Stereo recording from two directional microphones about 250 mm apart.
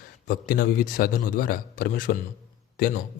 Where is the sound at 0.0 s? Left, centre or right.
Left.